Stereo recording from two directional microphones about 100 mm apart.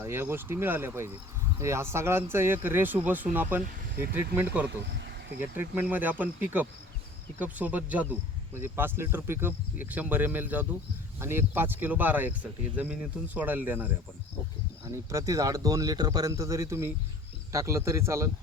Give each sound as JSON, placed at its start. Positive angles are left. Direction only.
{"t": 0.0, "sound": "speech", "side_deg": -25}
{"t": 14.8, "sound": "speech", "side_deg": -35}